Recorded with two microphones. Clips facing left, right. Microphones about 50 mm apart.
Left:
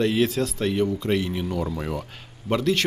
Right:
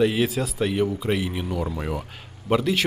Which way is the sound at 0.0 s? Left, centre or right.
Centre.